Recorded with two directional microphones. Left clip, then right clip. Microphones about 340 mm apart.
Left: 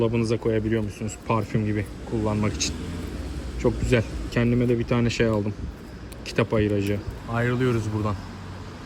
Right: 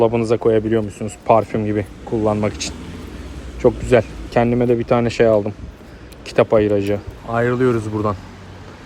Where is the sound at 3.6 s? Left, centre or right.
Right.